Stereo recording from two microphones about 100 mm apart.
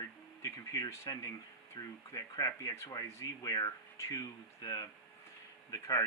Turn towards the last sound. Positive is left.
turn(degrees=35)  # may be behind; listen again after turning